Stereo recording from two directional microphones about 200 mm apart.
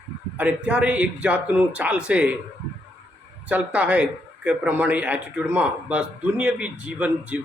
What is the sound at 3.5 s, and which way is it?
A man's voice, 5° right (ahead or behind).